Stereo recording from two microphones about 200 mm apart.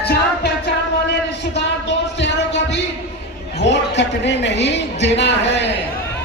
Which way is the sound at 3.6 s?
60° left (ahead or behind).